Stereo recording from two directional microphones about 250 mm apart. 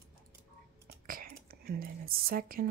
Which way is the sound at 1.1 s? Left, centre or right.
Right.